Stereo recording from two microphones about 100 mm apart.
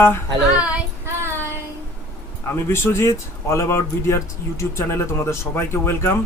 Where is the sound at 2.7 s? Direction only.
25° left (ahead or behind).